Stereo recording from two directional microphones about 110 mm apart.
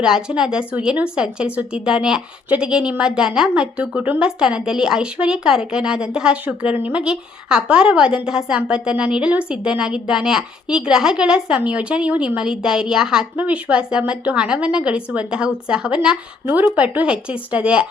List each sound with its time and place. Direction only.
0.0 s a woman's voice: 5° right (ahead or behind)